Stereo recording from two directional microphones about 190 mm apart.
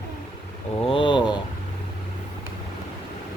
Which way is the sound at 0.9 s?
25° left (ahead or behind).